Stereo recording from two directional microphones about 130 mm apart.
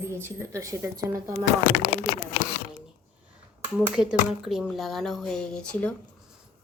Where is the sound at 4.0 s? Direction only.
10° right (ahead or behind); by 5.9 s 10° left (ahead or behind).